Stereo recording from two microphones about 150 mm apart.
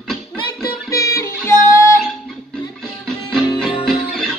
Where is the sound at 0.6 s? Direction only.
20° left (ahead or behind).